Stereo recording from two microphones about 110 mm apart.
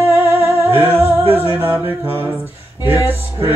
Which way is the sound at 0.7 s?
20° right (ahead or behind).